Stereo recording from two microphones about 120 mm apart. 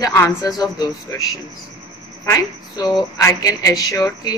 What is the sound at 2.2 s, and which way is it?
Speech, 30° left (ahead or behind).